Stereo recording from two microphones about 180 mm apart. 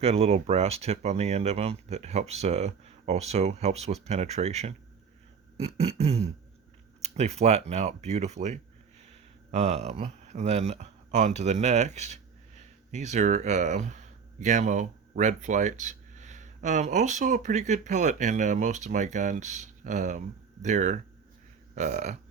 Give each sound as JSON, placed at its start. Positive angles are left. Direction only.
{"t": 0.0, "sound": "speech", "side_deg": -35}